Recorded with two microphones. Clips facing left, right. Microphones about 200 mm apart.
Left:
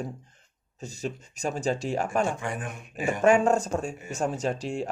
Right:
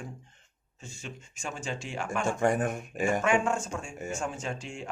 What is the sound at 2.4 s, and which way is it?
Speech, 45° right (ahead or behind).